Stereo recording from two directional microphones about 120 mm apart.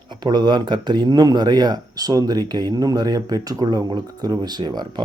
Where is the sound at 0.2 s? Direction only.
35° right (ahead or behind).